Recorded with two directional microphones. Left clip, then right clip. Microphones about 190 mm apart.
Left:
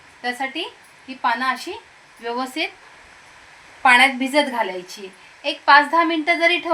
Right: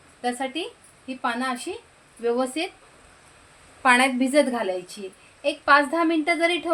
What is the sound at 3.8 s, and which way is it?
Speech, 60° right (ahead or behind).